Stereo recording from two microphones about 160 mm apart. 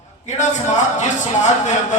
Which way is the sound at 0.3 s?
45° left (ahead or behind).